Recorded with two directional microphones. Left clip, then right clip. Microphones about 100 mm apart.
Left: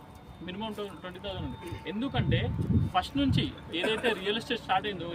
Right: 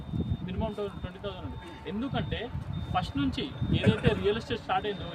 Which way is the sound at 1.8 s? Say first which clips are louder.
Left 1 dB; 20° right (ahead or behind).